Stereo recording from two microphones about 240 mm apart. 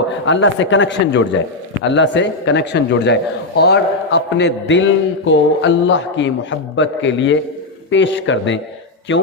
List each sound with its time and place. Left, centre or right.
0.3 s a man's voice: left